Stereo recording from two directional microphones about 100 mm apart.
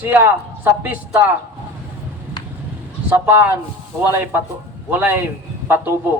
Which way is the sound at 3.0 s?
20° right (ahead or behind).